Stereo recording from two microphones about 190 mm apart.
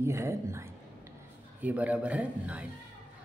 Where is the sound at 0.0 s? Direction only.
15° right (ahead or behind).